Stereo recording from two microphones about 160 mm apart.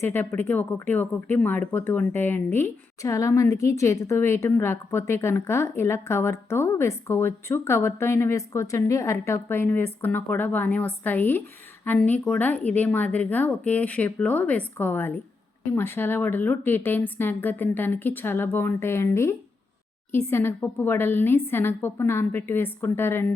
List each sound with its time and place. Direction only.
0.0 s speech: 15° left (ahead or behind)